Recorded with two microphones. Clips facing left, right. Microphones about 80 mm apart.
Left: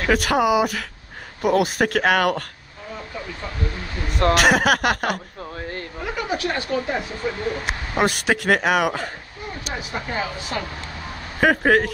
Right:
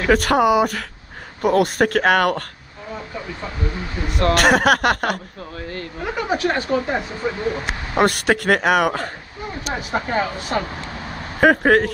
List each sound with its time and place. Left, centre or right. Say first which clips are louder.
0.0 s speech: right 3 dB; centre
3.2 s speech: even; centre
4.3 s speech: right 2 dB; centre
6.0 s speech: right 4 dB; right
7.2 s speech: right 2 dB; centre
9.7 s speech: right 6 dB; right
11.3 s speech: right 3 dB; centre